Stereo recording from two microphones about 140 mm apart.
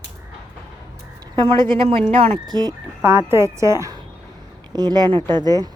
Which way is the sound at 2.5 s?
30° right (ahead or behind).